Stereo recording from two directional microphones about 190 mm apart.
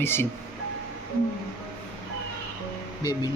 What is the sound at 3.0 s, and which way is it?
Speech, 20° left (ahead or behind).